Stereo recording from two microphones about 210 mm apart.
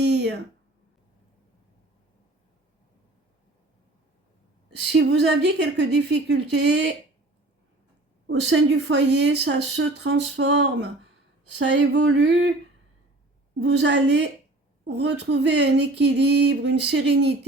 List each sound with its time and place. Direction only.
0.0 s a sound: 55° right (ahead or behind)
4.9 s speech: 55° right (ahead or behind)
8.3 s speech: 60° right (ahead or behind)
13.6 s speech: 60° right (ahead or behind)